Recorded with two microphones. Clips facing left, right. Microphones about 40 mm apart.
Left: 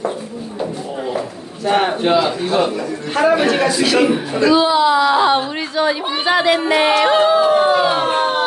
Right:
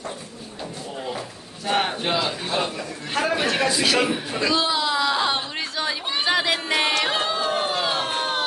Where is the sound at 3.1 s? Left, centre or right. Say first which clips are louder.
Left 8 dB; centre.